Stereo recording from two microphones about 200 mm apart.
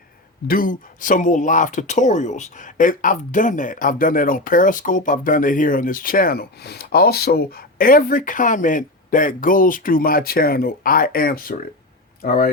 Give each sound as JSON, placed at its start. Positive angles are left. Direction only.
{"t": 0.4, "sound": "speech", "side_deg": 45}